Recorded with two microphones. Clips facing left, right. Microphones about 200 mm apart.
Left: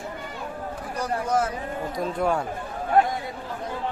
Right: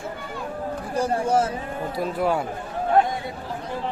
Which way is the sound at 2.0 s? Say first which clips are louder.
Right 1 dB; 5° right (ahead or behind).